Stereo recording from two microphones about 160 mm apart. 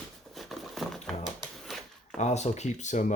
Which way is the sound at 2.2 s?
45° left (ahead or behind).